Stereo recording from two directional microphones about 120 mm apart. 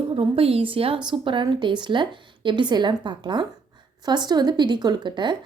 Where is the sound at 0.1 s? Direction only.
50° right (ahead or behind).